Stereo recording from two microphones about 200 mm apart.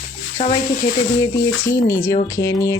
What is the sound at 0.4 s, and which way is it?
Speech, 30° left (ahead or behind).